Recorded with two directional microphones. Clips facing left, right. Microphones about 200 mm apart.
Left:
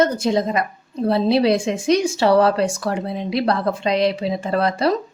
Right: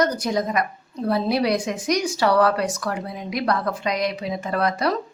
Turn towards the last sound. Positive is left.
turn(degrees=30)  # may be behind; listen again after turning